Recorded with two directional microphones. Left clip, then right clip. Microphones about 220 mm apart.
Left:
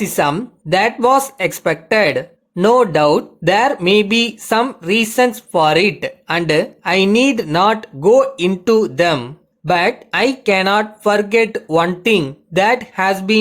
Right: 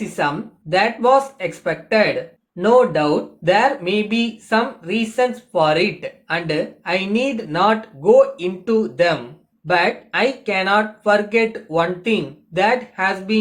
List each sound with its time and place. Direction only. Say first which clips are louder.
0.0 s speech: left 5 dB; 50° left (ahead or behind)